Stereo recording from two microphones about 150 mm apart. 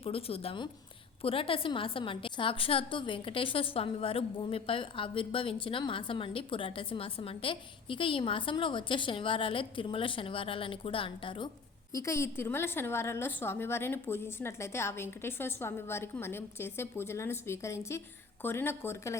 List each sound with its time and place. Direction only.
0.0 s a woman's voice: 40° left (ahead or behind)
11.9 s a woman's voice: 20° left (ahead or behind)